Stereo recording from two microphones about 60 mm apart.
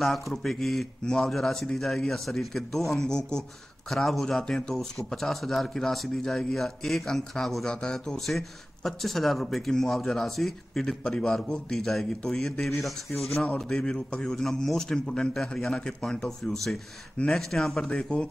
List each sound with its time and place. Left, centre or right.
0.0 s a man's voice: centre
17.8 s speech: centre